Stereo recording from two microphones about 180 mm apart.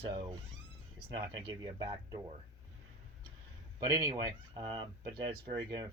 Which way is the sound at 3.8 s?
20° right (ahead or behind).